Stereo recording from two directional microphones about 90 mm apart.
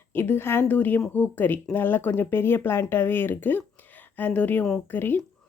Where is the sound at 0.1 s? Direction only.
25° left (ahead or behind).